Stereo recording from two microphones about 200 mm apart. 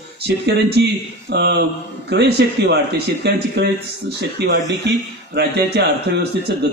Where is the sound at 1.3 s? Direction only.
60° right (ahead or behind).